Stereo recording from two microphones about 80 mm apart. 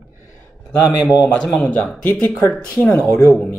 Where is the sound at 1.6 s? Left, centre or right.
Centre.